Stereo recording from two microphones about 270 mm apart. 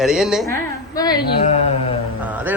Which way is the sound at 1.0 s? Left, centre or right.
Centre.